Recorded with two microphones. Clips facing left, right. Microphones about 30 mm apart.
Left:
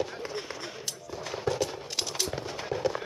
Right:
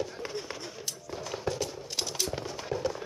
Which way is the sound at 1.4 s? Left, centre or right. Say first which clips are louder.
Left 4 dB; centre.